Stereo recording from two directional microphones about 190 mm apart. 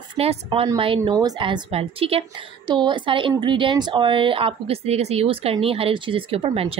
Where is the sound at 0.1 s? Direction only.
30° right (ahead or behind).